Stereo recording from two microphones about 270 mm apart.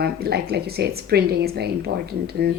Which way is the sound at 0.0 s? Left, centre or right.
Right.